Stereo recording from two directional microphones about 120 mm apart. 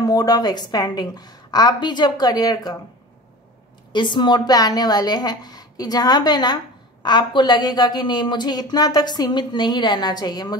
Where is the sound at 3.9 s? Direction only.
40° left (ahead or behind).